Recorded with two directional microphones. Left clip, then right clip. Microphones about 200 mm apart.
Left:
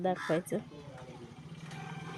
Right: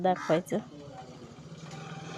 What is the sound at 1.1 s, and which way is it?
Vehicle, 20° left (ahead or behind).